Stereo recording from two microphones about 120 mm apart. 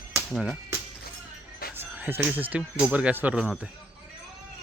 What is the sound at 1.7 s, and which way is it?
Music, 15° right (ahead or behind).